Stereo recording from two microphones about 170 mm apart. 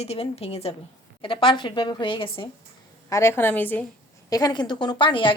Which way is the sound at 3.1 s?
15° left (ahead or behind).